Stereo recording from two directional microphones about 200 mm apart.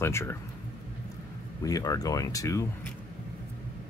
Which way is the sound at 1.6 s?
15° left (ahead or behind).